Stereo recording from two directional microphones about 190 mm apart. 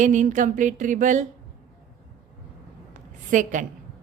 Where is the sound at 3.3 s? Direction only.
40° right (ahead or behind).